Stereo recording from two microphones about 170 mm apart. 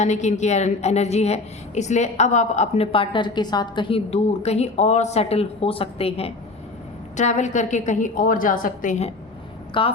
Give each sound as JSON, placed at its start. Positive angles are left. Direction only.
{"t": 0.0, "sound": "a woman's voice", "side_deg": 45}
{"t": 9.7, "sound": "a woman's voice", "side_deg": 30}